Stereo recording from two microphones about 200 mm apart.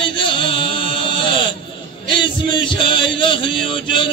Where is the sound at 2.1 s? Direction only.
25° left (ahead or behind).